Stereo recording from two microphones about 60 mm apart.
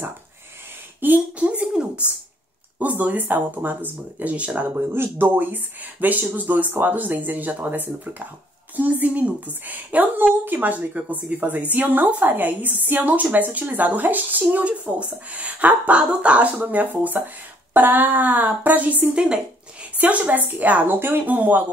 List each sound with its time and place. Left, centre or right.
1.0 s a woman's voice: right
4.7 s a woman's voice: right
19.2 s zipper: centre
20.0 s a woman's voice: right